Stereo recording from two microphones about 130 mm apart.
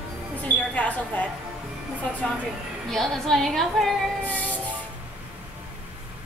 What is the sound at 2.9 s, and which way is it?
Music, 5° left (ahead or behind).